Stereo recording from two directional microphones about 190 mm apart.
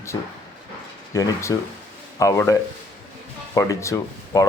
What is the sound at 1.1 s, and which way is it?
Speech, 15° left (ahead or behind).